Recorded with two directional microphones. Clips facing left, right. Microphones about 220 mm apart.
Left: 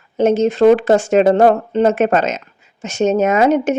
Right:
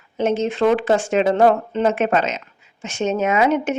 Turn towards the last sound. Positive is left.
turn(degrees=40)  # may be behind; listen again after turning